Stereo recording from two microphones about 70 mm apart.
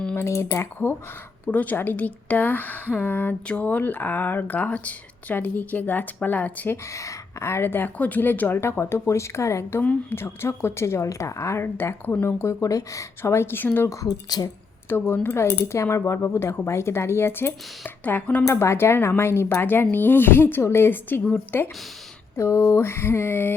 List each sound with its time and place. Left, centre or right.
0.2 s speech: left
1.5 s speech: left
6.8 s speech: left
8.8 s speech: left
13.9 s speech: left
14.8 s speech: left
18.4 s speech: left
22.4 s speech: left